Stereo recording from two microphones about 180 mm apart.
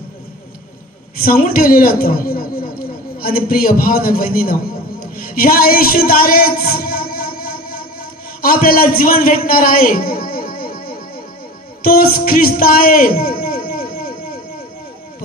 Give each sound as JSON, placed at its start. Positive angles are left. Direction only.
{"t": 1.2, "sound": "a man's voice", "side_deg": 55}
{"t": 6.0, "sound": "music", "side_deg": 55}
{"t": 8.4, "sound": "a man's voice", "side_deg": 55}